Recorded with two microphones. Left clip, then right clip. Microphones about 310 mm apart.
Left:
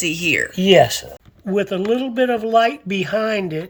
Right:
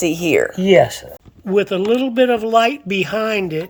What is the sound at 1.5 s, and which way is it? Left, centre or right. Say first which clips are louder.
Speech: right 3 dB; centre.